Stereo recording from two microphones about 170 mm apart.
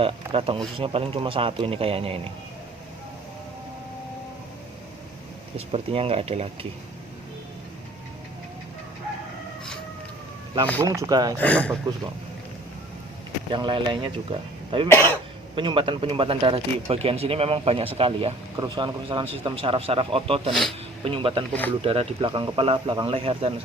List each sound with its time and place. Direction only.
0.0 s speech: 30° right (ahead or behind)
5.5 s speech: 35° right (ahead or behind)
10.8 s a man's voice: 20° right (ahead or behind)
11.3 s speech: 10° left (ahead or behind)
13.5 s a man's voice: 30° right (ahead or behind)
20.5 s speech: 5° left (ahead or behind)
21.0 s speech: 30° right (ahead or behind)